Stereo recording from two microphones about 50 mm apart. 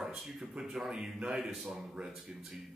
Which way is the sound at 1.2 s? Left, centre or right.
Centre.